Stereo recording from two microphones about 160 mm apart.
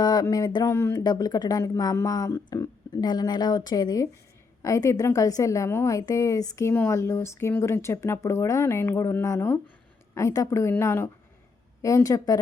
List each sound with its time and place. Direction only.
0.0 s a woman's voice: 25° left (ahead or behind)